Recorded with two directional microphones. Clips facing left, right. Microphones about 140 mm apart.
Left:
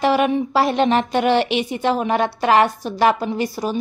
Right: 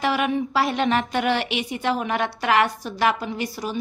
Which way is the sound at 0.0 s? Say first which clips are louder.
Left 5 dB; 30° left (ahead or behind).